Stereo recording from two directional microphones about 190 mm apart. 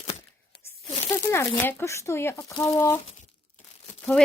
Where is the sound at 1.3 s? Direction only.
10° left (ahead or behind).